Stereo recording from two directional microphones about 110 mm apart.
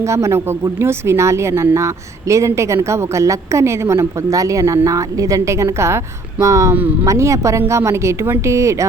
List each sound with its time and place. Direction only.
0.0 s a woman's voice: 25° right (ahead or behind)